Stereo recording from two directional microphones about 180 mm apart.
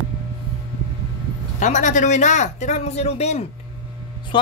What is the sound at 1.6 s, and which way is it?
Speech, 45° left (ahead or behind).